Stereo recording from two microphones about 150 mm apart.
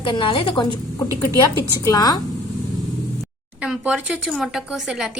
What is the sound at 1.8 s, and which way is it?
Speech, 25° left (ahead or behind).